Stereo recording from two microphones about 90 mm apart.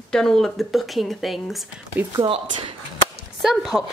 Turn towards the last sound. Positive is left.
turn(degrees=0)  # may be behind; listen again after turning